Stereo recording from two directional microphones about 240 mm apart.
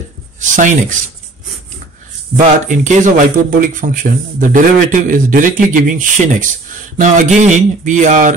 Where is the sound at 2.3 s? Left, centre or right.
Right.